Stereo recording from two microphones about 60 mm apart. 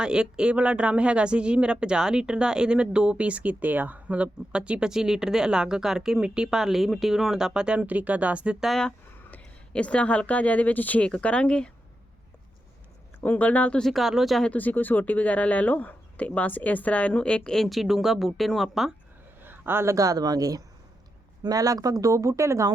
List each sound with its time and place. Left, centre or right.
0.0 s speech: centre
9.3 s speech: centre
13.2 s speech: left
13.8 s speech: centre
14.5 s speech: left; by 18.9 s centre
19.4 s a sound: right
20.0 s speech: right